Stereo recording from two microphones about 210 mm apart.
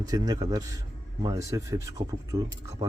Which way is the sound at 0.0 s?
15° right (ahead or behind).